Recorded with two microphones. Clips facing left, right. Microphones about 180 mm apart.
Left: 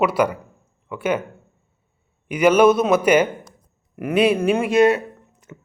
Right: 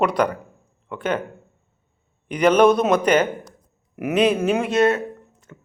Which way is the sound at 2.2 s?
5° left (ahead or behind).